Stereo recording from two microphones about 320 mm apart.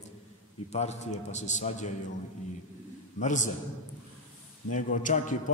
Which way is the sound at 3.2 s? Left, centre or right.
Left.